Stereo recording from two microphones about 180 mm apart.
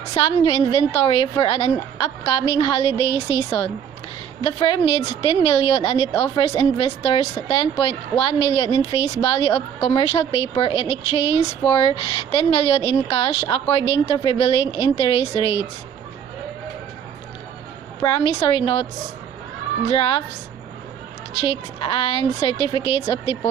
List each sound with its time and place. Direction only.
0.0 s a woman's voice: 30° left (ahead or behind)
18.0 s speech: 25° left (ahead or behind)
19.9 s speech: 30° left (ahead or behind)
21.4 s speech: 25° left (ahead or behind)